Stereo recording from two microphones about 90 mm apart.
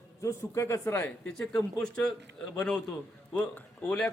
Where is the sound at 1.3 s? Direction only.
10° left (ahead or behind).